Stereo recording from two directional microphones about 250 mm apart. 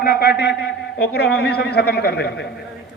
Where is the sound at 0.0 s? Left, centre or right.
Left.